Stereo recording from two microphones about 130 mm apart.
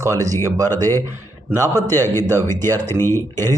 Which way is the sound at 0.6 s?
15° left (ahead or behind).